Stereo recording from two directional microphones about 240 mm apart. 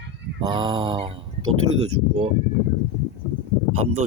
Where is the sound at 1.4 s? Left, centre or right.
Right.